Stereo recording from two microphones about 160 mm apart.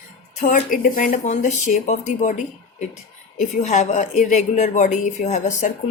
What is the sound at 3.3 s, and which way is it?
Speech, 45° left (ahead or behind).